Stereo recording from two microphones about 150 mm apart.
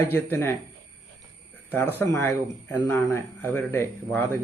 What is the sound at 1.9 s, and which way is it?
Speech, 15° left (ahead or behind).